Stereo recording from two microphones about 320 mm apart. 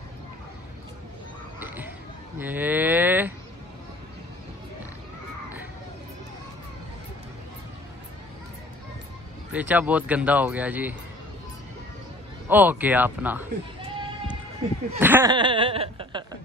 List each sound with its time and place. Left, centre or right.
2.3 s speech: centre
9.5 s speech: centre
12.4 s speech: centre
15.0 s laughter: centre